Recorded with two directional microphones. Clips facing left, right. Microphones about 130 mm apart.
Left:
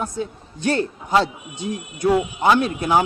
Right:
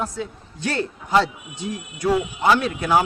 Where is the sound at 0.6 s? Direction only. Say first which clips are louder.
Left 4 dB; 20° left (ahead or behind).